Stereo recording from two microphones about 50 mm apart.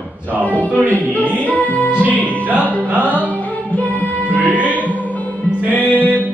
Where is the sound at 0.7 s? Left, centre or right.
Right.